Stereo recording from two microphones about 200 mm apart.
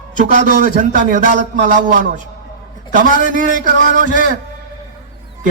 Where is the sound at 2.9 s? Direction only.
40° right (ahead or behind).